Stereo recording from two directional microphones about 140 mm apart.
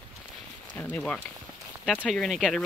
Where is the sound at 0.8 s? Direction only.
10° left (ahead or behind).